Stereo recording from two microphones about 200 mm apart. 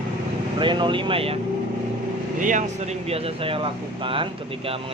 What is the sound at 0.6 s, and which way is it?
Speech, 25° right (ahead or behind).